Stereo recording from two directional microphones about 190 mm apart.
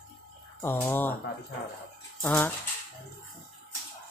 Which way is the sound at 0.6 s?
10° left (ahead or behind).